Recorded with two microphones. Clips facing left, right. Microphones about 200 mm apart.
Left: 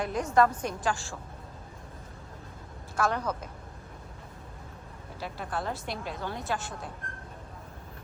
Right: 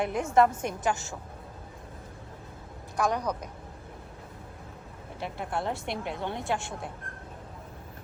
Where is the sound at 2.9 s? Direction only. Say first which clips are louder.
Right 1 dB; 15° right (ahead or behind).